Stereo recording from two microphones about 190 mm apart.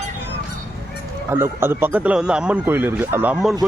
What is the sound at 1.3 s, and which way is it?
Speech, 10° right (ahead or behind).